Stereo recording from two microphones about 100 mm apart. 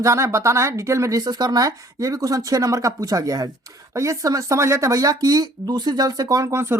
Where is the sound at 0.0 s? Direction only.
30° right (ahead or behind).